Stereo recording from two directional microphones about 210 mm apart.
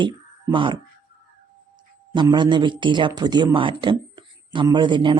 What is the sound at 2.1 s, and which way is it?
A man's voice, 20° right (ahead or behind).